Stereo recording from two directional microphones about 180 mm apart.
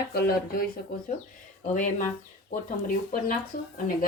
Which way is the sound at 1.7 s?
45° left (ahead or behind).